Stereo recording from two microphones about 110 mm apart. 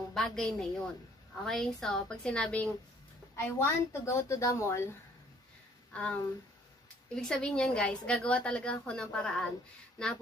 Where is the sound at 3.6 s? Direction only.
25° left (ahead or behind).